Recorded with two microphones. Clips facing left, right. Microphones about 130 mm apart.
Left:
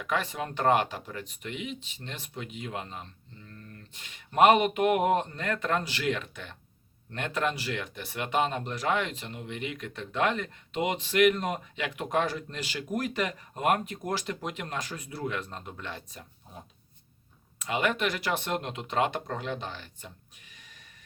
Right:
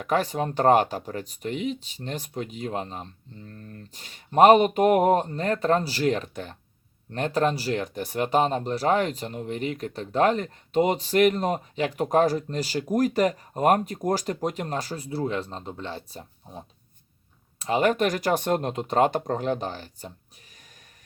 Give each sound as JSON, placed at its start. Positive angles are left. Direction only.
{"t": 0.0, "sound": "speech", "side_deg": -40}